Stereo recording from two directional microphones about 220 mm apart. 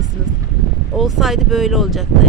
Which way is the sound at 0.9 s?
Centre (ahead or behind).